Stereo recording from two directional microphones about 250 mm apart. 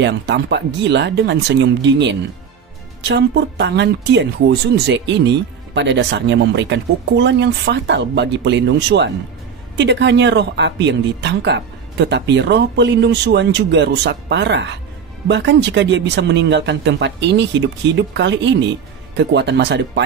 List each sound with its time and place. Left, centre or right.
0.0 s speech: right